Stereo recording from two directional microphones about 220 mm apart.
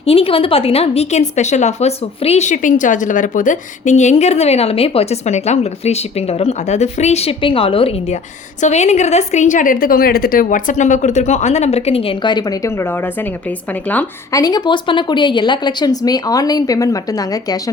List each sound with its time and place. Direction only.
0.0 s a woman's voice: 25° left (ahead or behind)